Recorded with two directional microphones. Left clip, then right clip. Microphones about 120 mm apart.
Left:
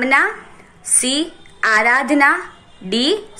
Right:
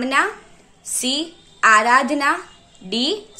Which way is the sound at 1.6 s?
30° right (ahead or behind).